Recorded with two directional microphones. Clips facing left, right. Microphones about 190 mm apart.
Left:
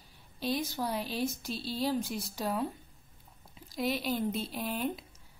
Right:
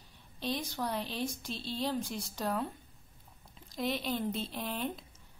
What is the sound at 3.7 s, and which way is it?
Speech, 5° left (ahead or behind).